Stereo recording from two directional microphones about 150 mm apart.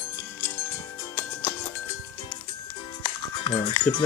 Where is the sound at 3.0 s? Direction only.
30° left (ahead or behind).